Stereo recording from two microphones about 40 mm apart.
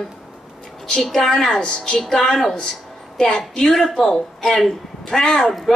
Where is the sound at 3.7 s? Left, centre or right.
Centre.